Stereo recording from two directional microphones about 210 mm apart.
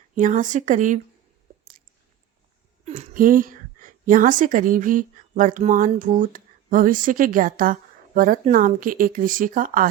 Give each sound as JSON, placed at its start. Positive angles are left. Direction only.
{"t": 0.2, "sound": "speech", "side_deg": -35}
{"t": 2.8, "sound": "a woman's voice", "side_deg": -35}